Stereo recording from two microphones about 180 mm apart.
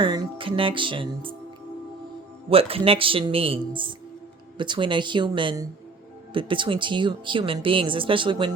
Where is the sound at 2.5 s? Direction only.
30° right (ahead or behind).